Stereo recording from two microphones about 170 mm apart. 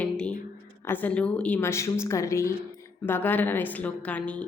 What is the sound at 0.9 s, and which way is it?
A woman's voice, 10° left (ahead or behind).